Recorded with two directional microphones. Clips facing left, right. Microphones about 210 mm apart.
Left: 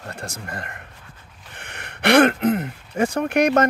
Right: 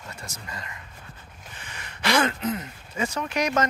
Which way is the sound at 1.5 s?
60° left (ahead or behind).